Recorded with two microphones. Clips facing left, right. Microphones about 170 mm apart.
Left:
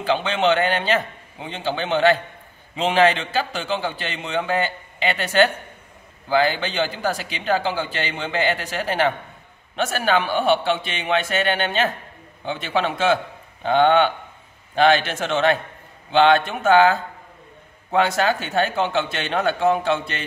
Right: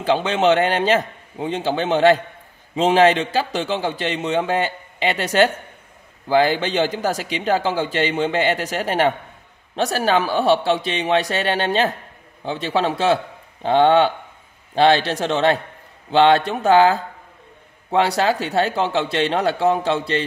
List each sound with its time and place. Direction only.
0.0 s a man's voice: 35° right (ahead or behind)